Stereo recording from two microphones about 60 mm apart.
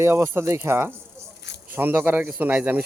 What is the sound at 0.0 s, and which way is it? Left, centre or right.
A man's voice, right.